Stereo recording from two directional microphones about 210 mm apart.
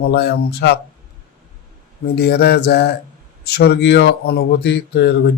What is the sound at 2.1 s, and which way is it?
Speech, 50° left (ahead or behind).